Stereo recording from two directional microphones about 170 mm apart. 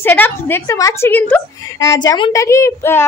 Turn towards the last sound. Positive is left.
turn(degrees=15)  # may be behind; listen again after turning